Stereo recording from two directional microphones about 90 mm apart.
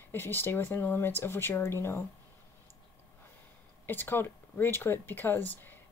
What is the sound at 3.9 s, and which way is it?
A woman's voice, 25° left (ahead or behind).